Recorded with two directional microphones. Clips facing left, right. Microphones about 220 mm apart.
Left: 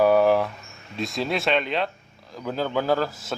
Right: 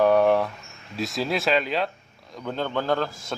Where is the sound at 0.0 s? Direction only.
5° left (ahead or behind).